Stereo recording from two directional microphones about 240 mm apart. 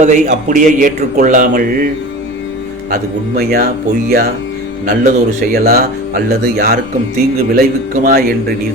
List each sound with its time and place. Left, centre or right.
0.0 s speech: right
2.9 s speech: right
4.9 s speech: right